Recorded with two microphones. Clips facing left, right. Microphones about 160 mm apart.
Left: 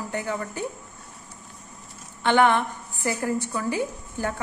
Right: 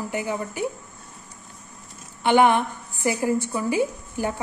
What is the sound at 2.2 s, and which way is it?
A woman's voice, 15° right (ahead or behind).